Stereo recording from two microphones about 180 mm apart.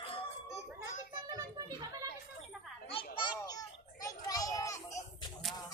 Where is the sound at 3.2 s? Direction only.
25° left (ahead or behind).